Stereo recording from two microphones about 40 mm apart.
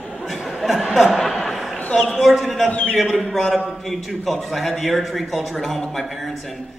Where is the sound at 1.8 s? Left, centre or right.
Left.